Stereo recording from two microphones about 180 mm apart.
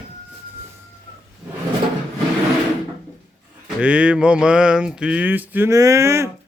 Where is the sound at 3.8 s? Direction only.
5° right (ahead or behind).